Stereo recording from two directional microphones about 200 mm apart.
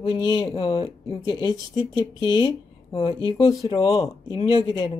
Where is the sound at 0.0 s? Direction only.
25° left (ahead or behind).